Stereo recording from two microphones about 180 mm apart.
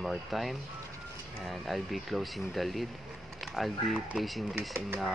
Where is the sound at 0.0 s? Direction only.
Centre (ahead or behind).